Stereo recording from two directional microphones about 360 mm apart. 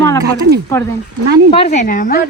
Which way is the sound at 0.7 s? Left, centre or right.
Centre.